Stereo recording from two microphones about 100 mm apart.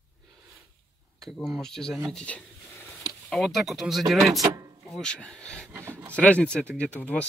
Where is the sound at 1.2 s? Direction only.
5° left (ahead or behind).